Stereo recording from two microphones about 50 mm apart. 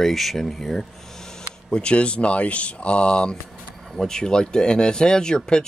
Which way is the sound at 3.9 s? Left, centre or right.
Centre.